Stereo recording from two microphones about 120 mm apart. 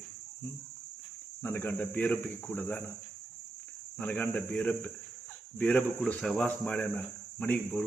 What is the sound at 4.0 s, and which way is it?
Speech, 15° left (ahead or behind).